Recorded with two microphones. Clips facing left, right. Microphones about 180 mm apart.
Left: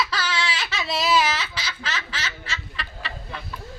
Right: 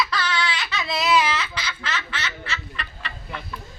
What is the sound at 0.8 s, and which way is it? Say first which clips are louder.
Baby cry: even; 35° left (ahead or behind).